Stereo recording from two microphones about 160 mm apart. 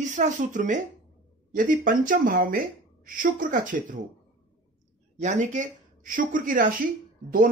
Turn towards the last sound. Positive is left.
turn(degrees=-60)  # may be behind; listen again after turning